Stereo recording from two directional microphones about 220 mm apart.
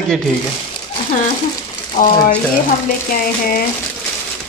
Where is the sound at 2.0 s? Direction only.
35° left (ahead or behind).